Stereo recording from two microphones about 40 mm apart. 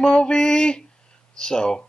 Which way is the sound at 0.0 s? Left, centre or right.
Left.